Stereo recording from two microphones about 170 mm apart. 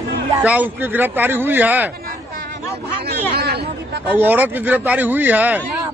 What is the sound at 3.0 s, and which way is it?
Chatter, 70° right (ahead or behind).